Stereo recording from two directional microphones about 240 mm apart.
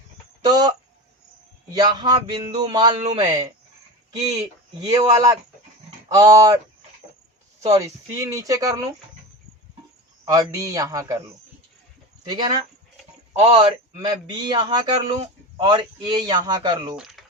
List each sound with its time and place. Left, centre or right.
0.4 s a man's voice: centre
1.7 s a man's voice: centre
7.8 s a man's voice: centre
10.2 s a man's voice: centre
12.3 s a man's voice: centre
17.0 s a sound: centre